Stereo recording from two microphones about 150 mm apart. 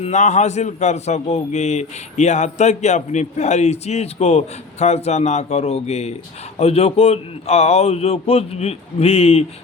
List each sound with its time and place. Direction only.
0.0 s a man's voice: 50° left (ahead or behind)